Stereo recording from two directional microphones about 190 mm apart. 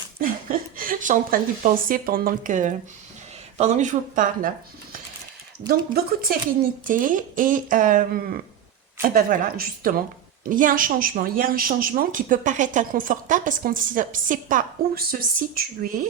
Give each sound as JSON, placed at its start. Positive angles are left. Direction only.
{"t": 0.2, "sound": "a woman's voice", "side_deg": -50}